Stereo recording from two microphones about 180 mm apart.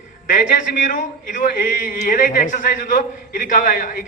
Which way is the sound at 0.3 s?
45° left (ahead or behind).